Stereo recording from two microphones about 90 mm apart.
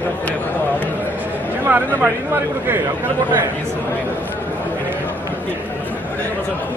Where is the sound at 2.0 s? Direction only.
20° right (ahead or behind).